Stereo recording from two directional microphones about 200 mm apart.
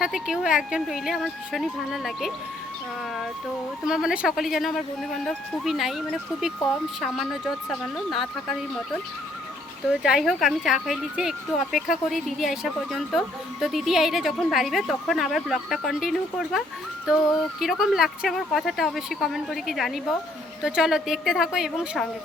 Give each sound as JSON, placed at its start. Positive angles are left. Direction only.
{"t": 0.0, "sound": "speech", "side_deg": -5}
{"t": 3.8, "sound": "speech", "side_deg": -5}
{"t": 9.9, "sound": "speech", "side_deg": -5}